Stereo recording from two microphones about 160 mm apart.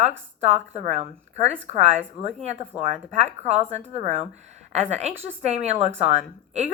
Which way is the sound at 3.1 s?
45° right (ahead or behind).